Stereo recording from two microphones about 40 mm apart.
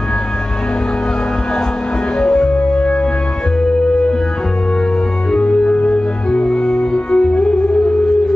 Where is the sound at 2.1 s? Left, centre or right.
Left.